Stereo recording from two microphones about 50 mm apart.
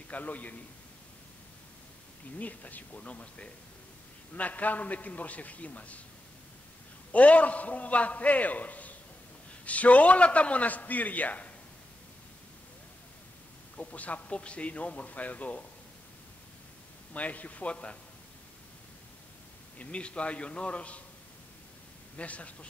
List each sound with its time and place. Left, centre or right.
0.1 s a man's voice: left
2.3 s a man's voice: left
7.1 s a man's voice: left
13.7 s a man's voice: left
17.1 s a man's voice: left
19.8 s a man's voice: left
22.1 s a man's voice: left